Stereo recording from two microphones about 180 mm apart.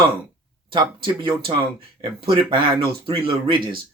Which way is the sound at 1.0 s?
25° right (ahead or behind).